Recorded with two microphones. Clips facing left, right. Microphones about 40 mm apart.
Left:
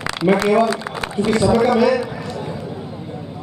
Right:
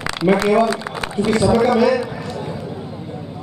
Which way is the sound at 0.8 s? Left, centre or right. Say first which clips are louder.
Even; centre.